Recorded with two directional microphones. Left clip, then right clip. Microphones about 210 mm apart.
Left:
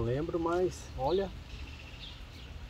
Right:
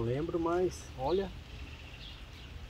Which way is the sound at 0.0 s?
5° right (ahead or behind).